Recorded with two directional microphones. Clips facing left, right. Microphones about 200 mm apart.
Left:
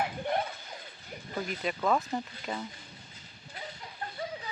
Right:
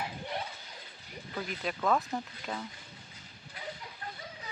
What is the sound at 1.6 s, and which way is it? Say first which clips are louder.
Speech: left 1 dB; centre (ahead or behind).